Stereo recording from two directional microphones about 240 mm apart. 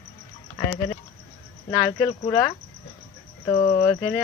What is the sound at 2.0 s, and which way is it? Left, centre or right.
Speech, centre.